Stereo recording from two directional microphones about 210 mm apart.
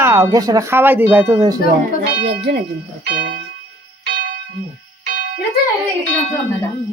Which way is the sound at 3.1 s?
55° right (ahead or behind).